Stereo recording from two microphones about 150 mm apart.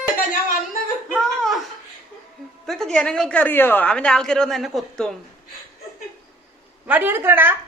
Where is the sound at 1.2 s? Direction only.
Centre (ahead or behind).